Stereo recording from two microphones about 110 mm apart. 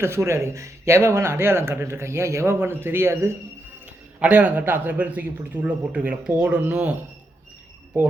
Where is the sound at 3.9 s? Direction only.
15° right (ahead or behind).